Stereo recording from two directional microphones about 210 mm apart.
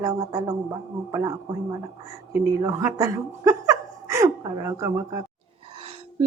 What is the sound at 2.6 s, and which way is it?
Speech, 15° right (ahead or behind).